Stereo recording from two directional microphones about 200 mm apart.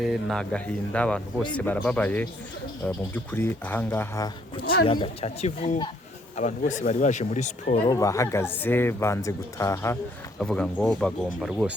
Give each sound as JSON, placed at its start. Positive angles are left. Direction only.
{"t": 0.0, "sound": "speech", "side_deg": 0}
{"t": 4.6, "sound": "a man's voice", "side_deg": 50}
{"t": 4.9, "sound": "speech", "side_deg": 30}
{"t": 7.9, "sound": "speech", "side_deg": 15}